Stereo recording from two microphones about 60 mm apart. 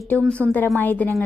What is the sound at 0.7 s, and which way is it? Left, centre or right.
Speech, left.